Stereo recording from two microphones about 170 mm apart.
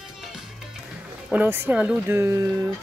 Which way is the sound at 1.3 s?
10° right (ahead or behind).